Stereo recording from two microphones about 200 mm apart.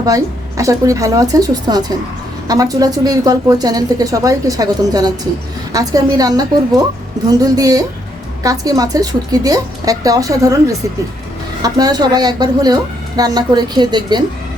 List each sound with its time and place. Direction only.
0.0 s a woman's voice: 15° right (ahead or behind)